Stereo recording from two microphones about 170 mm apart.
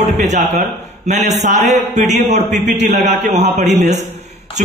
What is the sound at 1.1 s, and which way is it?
A man's voice, 45° right (ahead or behind).